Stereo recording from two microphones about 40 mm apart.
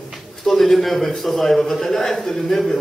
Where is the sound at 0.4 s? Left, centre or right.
Centre.